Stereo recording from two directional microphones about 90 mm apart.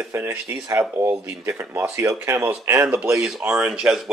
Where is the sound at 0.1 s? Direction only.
25° right (ahead or behind).